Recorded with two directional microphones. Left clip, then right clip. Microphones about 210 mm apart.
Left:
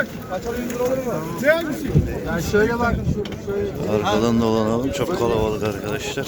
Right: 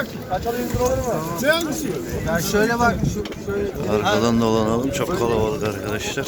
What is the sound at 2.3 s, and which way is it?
Speech, 30° left (ahead or behind).